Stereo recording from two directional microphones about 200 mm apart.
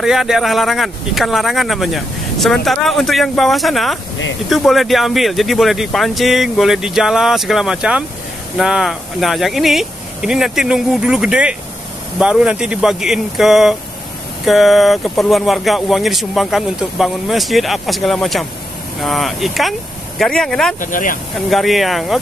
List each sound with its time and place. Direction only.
0.0 s speech: centre (ahead or behind)
20.8 s speech: 40° left (ahead or behind)
21.5 s speech: centre (ahead or behind)